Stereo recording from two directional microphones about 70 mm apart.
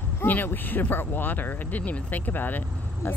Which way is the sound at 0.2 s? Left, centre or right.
Left.